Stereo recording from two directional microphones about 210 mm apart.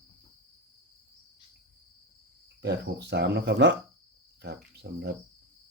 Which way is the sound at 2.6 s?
55° right (ahead or behind).